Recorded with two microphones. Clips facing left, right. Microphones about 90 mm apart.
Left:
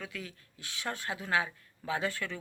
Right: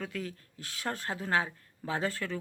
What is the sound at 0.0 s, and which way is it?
Speech, 40° right (ahead or behind).